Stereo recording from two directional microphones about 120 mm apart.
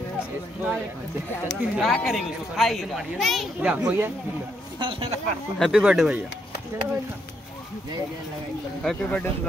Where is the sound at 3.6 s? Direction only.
10° right (ahead or behind).